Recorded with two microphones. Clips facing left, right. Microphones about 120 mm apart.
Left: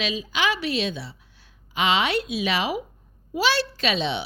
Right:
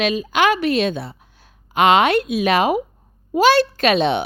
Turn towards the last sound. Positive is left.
turn(degrees=-55)  # may be behind; listen again after turning